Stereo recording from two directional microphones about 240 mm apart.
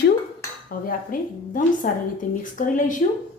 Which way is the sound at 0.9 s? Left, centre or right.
Left.